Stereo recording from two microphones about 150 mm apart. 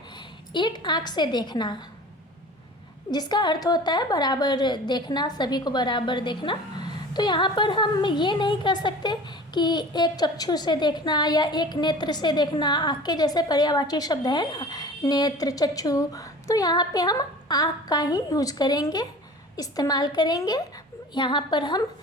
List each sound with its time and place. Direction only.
0.5 s a woman's voice: 30° left (ahead or behind)
3.1 s a woman's voice: 30° left (ahead or behind)